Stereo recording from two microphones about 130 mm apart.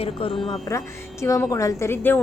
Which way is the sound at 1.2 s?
25° left (ahead or behind).